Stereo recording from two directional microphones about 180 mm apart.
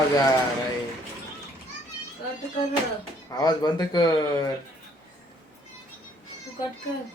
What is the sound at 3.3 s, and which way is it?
Speech, 25° left (ahead or behind).